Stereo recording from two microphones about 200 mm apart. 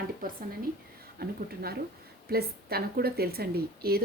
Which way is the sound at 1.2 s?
50° right (ahead or behind).